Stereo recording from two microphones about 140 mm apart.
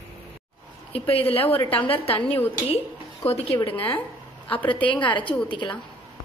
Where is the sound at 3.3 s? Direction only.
45° left (ahead or behind).